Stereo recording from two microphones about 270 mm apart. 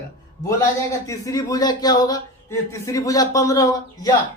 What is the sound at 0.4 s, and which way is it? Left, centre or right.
A man's voice, centre.